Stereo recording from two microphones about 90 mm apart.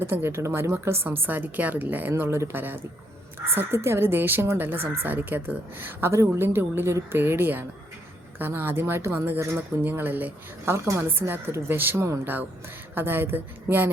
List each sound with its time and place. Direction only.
0.0 s speech: 30° right (ahead or behind)